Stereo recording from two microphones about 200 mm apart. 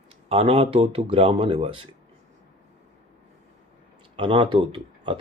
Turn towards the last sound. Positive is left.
turn(degrees=-25)  # may be behind; listen again after turning